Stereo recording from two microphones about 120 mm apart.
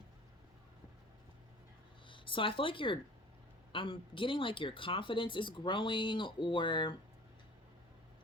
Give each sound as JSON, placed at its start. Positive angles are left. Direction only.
{"t": 2.0, "sound": "speech", "side_deg": 45}